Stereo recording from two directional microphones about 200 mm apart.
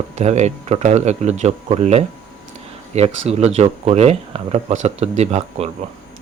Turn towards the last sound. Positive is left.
turn(degrees=-35)  # may be behind; listen again after turning